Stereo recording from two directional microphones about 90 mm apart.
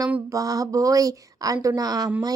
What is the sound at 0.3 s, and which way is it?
Speech, 40° right (ahead or behind).